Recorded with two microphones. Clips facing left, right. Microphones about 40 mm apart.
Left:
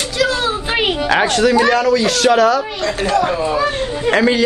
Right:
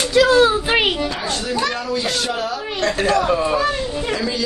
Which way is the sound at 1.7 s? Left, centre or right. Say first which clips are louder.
Left 8 dB; left.